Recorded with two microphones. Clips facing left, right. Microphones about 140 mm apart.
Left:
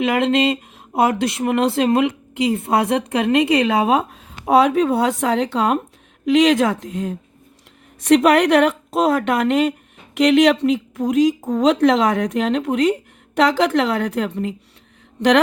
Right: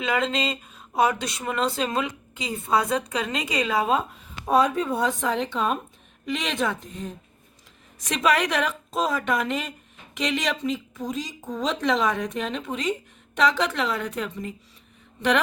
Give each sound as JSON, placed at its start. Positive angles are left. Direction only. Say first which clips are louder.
{"t": 0.0, "sound": "a woman's voice", "louder": "left 8 dB", "side_deg": 60}
{"t": 8.0, "sound": "a woman's voice", "louder": "left 10 dB", "side_deg": 65}